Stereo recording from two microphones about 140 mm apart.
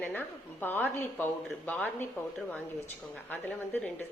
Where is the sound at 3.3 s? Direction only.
10° left (ahead or behind).